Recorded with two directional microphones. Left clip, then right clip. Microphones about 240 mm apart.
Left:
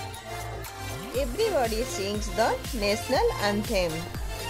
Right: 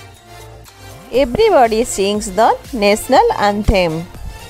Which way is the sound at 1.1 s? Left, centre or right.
Right.